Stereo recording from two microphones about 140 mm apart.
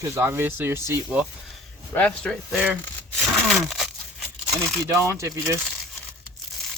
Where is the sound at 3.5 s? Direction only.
Centre (ahead or behind).